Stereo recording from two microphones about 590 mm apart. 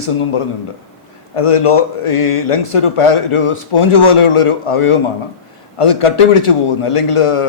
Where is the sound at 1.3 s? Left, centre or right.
Left.